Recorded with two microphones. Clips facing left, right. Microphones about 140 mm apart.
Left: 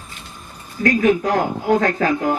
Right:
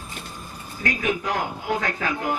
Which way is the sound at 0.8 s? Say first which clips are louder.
Left 9 dB; 40° left (ahead or behind).